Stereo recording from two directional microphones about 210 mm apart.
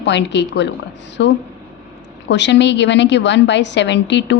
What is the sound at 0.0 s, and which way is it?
A woman's voice, 55° left (ahead or behind).